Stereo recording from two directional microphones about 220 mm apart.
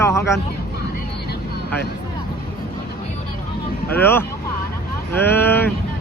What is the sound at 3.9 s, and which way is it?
A man's voice, 10° left (ahead or behind).